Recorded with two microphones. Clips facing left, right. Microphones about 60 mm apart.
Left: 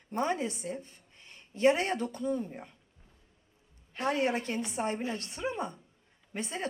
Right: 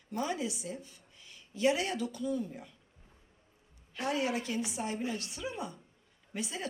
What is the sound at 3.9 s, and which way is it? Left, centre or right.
A woman's voice, left.